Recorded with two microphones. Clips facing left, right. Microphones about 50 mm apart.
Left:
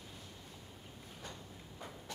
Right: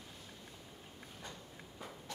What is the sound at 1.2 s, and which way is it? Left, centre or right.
Walk, centre.